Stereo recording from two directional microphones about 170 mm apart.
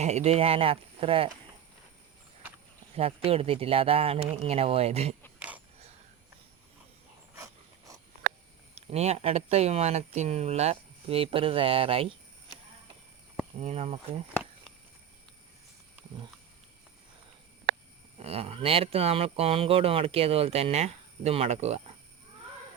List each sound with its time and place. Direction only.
0.0 s speech: 40° right (ahead or behind)
2.9 s speech: 35° right (ahead or behind)
5.4 s a sound: 10° right (ahead or behind)
7.3 s a sound: 20° right (ahead or behind)
8.7 s speech: 40° right (ahead or behind)
13.6 s speech: 40° right (ahead or behind)
18.2 s speech: 35° right (ahead or behind)